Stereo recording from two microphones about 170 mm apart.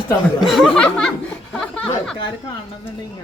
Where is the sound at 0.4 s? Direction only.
Centre (ahead or behind).